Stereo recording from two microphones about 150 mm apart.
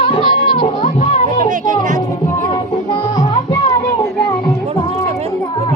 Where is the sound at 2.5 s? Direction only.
30° left (ahead or behind).